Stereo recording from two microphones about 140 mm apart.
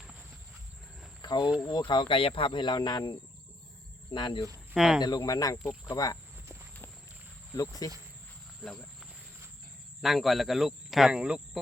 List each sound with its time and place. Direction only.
1.2 s cricket: 30° left (ahead or behind)
1.9 s speech: 35° left (ahead or behind)
4.7 s speech: 5° right (ahead or behind)
5.0 s speech: 25° left (ahead or behind)
7.5 s speech: 25° left (ahead or behind)
8.6 s speech: 5° left (ahead or behind)